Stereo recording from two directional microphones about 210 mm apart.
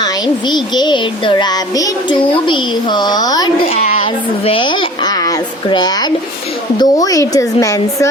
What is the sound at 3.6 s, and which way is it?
A child's voice, 30° left (ahead or behind).